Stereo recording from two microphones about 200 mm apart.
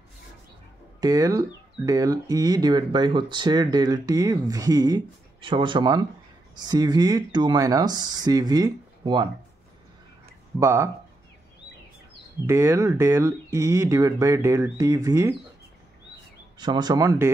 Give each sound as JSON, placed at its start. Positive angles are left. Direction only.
{"t": 1.0, "sound": "speech", "side_deg": -20}
{"t": 10.6, "sound": "speech", "side_deg": -15}
{"t": 12.4, "sound": "speech", "side_deg": -15}
{"t": 16.5, "sound": "speech", "side_deg": -20}